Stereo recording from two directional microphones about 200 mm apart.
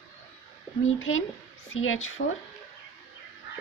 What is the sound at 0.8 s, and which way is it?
Speech, 80° left.